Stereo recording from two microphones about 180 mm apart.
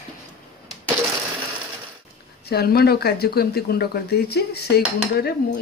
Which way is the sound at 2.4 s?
60° left (ahead or behind).